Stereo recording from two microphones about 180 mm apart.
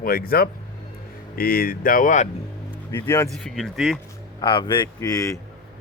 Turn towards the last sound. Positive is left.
turn(degrees=20)  # may be behind; listen again after turning